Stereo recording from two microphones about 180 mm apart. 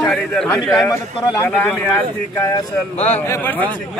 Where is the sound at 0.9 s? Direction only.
15° left (ahead or behind).